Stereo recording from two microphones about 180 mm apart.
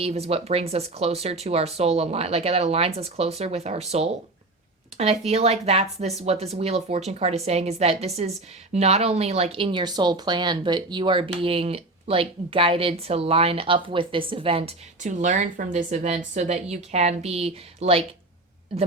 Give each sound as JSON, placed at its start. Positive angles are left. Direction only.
{"t": 0.0, "sound": "speech", "side_deg": -35}